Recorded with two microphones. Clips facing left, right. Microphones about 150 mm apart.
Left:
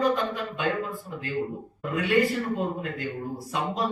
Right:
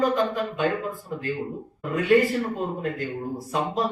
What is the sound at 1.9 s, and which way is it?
Speech, 45° right (ahead or behind).